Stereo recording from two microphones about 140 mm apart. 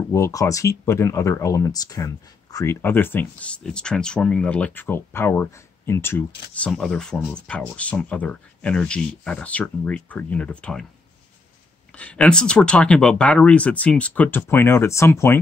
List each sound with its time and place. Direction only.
0.1 s speech: 20° left (ahead or behind)
6.7 s speech: 5° left (ahead or behind)
11.9 s speech: 10° left (ahead or behind)